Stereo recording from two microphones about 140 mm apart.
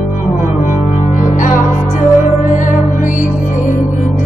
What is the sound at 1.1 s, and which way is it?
Music, 65° left (ahead or behind).